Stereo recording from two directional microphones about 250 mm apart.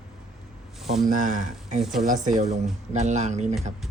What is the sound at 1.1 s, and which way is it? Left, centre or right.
Speech, right.